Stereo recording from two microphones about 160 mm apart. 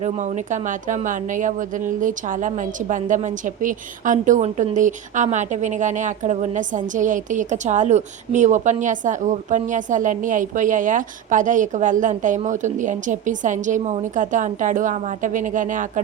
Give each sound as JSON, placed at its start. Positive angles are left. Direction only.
{"t": 0.0, "sound": "a woman's voice", "side_deg": -50}